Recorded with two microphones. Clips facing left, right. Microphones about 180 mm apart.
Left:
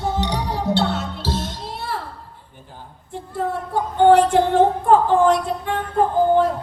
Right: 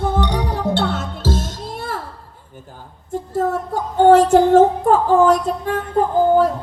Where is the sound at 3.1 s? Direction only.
45° right (ahead or behind).